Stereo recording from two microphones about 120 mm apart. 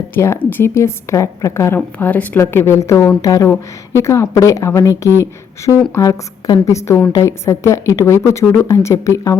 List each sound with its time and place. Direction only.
0.1 s speech: 20° left (ahead or behind)